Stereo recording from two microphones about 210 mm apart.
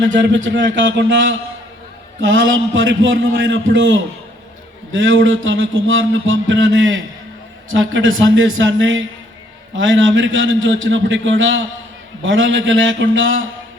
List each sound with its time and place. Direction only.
0.0 s a man's voice: 60° right (ahead or behind)
4.9 s music: 65° right (ahead or behind)
9.7 s a man's voice: 65° right (ahead or behind)
12.2 s music: 65° right (ahead or behind)